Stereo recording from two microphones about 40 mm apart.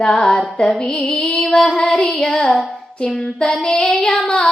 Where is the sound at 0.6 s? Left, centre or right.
Centre.